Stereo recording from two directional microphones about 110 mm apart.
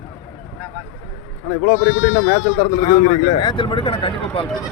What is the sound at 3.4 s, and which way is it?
Speech, 45° left (ahead or behind).